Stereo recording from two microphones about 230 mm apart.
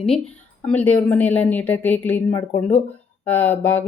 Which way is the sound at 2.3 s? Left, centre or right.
Left.